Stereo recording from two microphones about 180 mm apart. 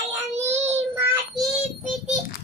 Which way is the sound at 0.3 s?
40° right (ahead or behind).